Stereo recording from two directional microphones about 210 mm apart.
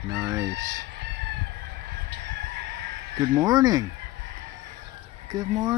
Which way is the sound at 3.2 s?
15° right (ahead or behind).